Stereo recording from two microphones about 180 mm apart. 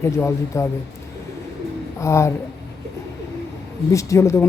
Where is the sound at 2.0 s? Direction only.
15° left (ahead or behind).